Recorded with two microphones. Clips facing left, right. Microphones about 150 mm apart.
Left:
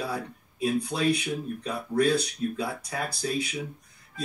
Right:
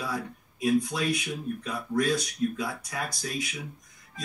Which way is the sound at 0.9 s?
30° left (ahead or behind).